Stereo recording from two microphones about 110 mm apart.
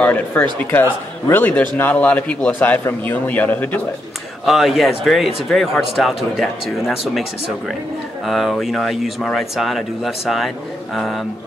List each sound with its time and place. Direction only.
0.0 s speech: 15° left (ahead or behind)
4.5 s a man's voice: centre (ahead or behind)